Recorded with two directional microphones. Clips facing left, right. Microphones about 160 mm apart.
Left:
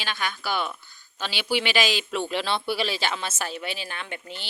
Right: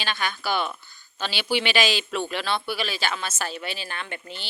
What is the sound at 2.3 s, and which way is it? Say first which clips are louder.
A man's voice: left 1 dB; 25° left (ahead or behind).